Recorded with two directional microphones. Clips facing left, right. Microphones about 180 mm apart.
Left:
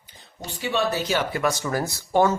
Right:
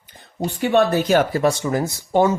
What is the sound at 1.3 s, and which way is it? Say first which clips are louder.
Speech: right 6 dB; 30° right (ahead or behind).